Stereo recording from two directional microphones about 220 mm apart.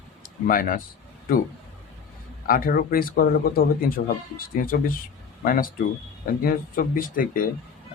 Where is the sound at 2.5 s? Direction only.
40° left (ahead or behind).